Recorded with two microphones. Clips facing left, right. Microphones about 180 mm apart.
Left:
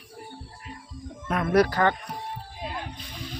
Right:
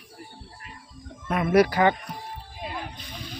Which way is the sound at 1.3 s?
5° right (ahead or behind).